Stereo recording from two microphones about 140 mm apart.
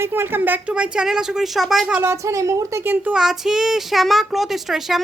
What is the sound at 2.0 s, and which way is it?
Speech, 20° right (ahead or behind).